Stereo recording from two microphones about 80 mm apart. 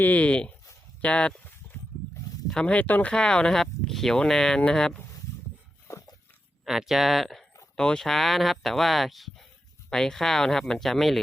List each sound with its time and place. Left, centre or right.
0.0 s speech: centre
2.5 s speech: centre
5.9 s dog: left
6.7 s speech: centre